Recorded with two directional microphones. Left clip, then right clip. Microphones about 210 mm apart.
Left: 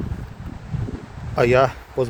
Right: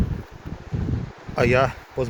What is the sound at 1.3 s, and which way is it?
Speech, 10° left (ahead or behind).